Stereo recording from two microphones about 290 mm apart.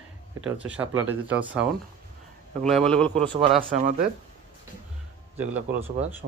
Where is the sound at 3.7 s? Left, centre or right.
Right.